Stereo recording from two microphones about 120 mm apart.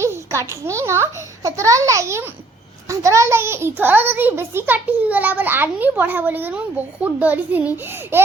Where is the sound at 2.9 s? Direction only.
25° right (ahead or behind).